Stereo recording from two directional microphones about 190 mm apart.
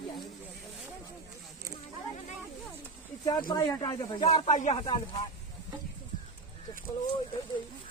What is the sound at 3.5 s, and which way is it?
Speech, 25° left (ahead or behind).